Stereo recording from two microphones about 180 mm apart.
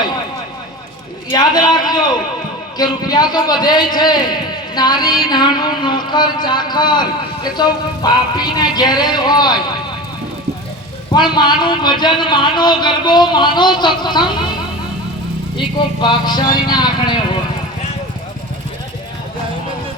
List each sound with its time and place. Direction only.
1.3 s a man's voice: 25° left (ahead or behind)
11.1 s speech: 25° left (ahead or behind)
15.5 s speech: 25° left (ahead or behind)